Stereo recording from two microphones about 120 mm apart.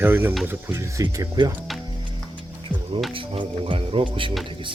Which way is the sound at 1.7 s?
Centre (ahead or behind).